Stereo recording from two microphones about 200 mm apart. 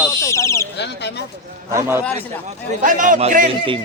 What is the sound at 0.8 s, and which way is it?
Speech, 60° left (ahead or behind).